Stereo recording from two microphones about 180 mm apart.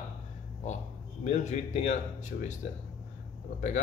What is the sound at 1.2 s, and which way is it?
A man's voice, 40° left (ahead or behind).